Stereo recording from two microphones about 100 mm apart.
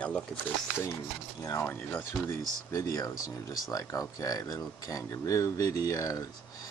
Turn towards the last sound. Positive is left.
turn(degrees=35)  # may be behind; listen again after turning